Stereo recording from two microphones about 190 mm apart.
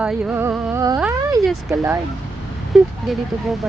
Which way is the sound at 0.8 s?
20° right (ahead or behind).